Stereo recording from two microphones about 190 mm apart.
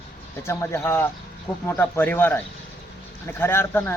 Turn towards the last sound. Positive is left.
turn(degrees=10)  # may be behind; listen again after turning